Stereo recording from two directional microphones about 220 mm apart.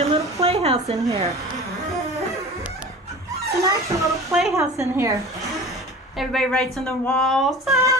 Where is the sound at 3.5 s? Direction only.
15° right (ahead or behind).